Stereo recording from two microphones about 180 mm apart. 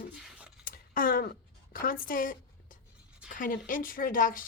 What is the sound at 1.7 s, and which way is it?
A woman's voice, 50° left (ahead or behind).